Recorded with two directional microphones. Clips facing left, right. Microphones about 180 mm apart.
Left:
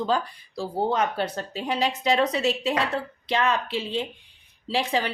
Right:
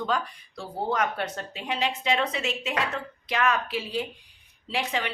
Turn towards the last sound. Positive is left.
turn(degrees=35)  # may be behind; listen again after turning